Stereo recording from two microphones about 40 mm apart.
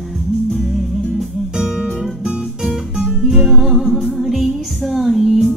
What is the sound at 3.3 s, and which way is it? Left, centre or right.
Music, centre.